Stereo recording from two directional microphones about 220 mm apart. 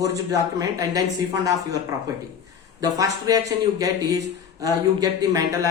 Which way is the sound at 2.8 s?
15° right (ahead or behind).